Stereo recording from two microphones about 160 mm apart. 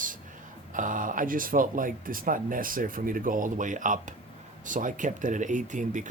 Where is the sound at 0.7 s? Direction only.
55° right (ahead or behind).